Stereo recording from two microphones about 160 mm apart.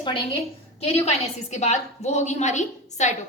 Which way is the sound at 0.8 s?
40° left (ahead or behind).